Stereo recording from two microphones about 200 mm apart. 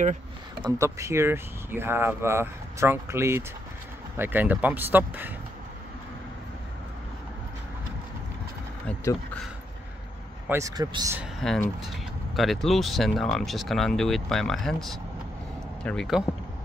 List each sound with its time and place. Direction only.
0.6 s speech: 15° right (ahead or behind)
8.8 s speech: 5° left (ahead or behind)
10.5 s speech: 20° right (ahead or behind)
11.1 s speech: centre (ahead or behind)